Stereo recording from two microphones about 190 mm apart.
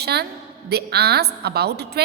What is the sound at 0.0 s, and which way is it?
A woman's voice, 60° right (ahead or behind).